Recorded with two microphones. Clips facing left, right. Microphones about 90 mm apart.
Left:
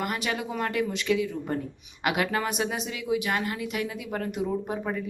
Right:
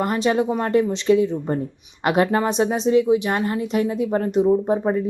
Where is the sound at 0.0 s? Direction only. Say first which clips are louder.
Right 10 dB; 30° right (ahead or behind).